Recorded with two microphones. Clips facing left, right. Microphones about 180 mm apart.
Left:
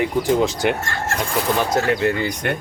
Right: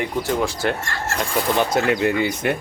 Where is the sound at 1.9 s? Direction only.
20° right (ahead or behind).